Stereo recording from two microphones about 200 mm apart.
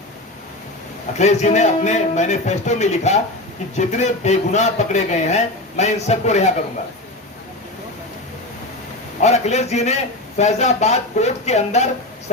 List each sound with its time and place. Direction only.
1.2 s a man's voice: 35° left (ahead or behind)
9.2 s a man's voice: 35° left (ahead or behind)